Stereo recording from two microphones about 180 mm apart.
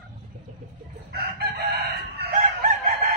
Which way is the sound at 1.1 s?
60° right (ahead or behind).